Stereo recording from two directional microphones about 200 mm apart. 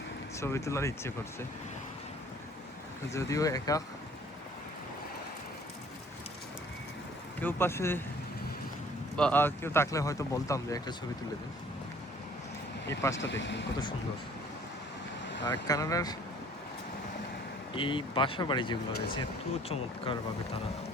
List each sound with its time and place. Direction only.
0.3 s speech: 15° left (ahead or behind)
3.1 s speech: 15° left (ahead or behind)
7.3 s speech: 10° left (ahead or behind)
9.1 s speech: 5° left (ahead or behind)
12.9 s speech: 15° left (ahead or behind)
13.1 s speech: 65° left (ahead or behind)
15.6 s speech: 15° left (ahead or behind)
17.7 s speech: 25° left (ahead or behind)